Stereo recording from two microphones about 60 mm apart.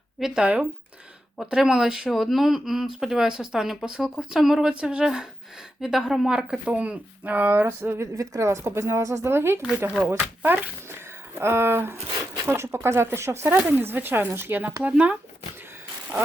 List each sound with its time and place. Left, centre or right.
0.2 s speech: centre
0.4 s speech: right
1.4 s speech: centre
4.7 s speech: centre
6.7 s speech: right
8.1 s a woman's voice: right
10.1 s speech: right
11.3 s a woman's voice: right
14.8 s speech: right